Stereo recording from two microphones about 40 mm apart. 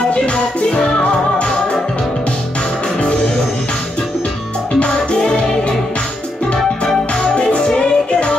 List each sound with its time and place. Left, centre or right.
0.1 s music: left
4.7 s music: left
7.2 s music: left